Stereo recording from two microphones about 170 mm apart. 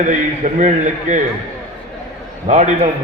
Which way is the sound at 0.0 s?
45° right (ahead or behind).